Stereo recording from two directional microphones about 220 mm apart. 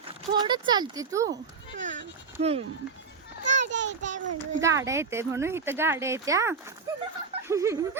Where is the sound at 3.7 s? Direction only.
55° right (ahead or behind).